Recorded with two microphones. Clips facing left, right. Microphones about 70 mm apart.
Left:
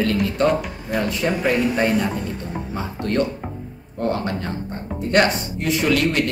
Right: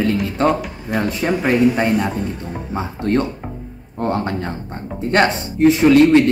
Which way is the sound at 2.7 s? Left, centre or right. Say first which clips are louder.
Right 5 dB; right.